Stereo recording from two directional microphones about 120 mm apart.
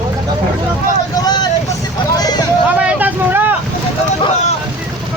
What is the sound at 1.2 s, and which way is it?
Vehicle, 35° left (ahead or behind).